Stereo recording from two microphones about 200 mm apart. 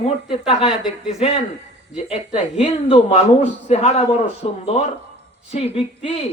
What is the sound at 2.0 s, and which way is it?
Speech, 30° left (ahead or behind).